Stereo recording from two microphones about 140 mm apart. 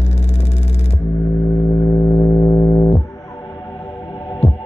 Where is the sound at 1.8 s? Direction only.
20° left (ahead or behind).